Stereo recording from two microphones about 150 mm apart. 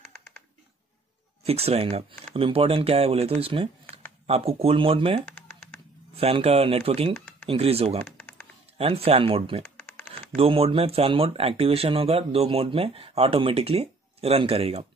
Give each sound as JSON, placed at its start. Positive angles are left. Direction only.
{"t": 0.1, "sound": "typing", "side_deg": 10}
{"t": 1.4, "sound": "speech", "side_deg": -40}
{"t": 7.2, "sound": "a sound", "side_deg": 10}
{"t": 7.4, "sound": "speech", "side_deg": -40}
{"t": 8.0, "sound": "typing", "side_deg": 10}
{"t": 8.7, "sound": "speech", "side_deg": -40}